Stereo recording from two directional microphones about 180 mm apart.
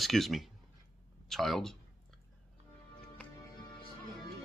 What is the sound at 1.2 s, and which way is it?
Speech, centre (ahead or behind).